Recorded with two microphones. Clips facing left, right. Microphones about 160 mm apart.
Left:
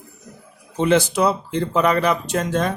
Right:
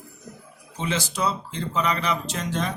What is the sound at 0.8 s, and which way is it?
Speech, 60° left (ahead or behind).